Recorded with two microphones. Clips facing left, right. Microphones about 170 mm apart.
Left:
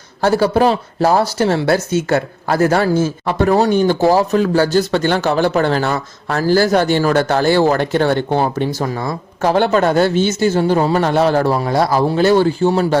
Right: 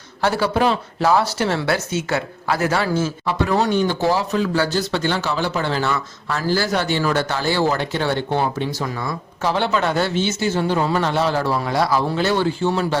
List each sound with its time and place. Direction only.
0.2 s speech: 40° left (ahead or behind)